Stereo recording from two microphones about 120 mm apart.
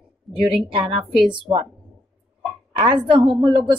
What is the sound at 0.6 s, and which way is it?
A woman's voice, 50° right (ahead or behind).